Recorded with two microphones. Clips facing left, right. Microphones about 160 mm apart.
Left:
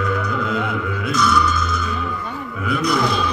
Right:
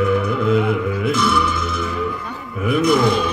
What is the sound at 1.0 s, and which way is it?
Music, 25° right (ahead or behind).